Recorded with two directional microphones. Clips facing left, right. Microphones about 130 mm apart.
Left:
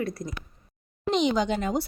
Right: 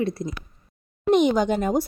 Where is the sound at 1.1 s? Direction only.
50° right (ahead or behind).